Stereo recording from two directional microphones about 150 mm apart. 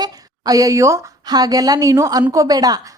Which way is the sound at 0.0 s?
25° right (ahead or behind).